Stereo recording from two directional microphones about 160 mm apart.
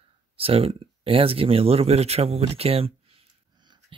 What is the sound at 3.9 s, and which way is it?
Beatboxing, 35° right (ahead or behind).